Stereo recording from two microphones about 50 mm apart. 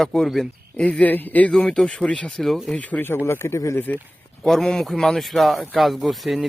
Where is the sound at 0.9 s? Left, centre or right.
Left.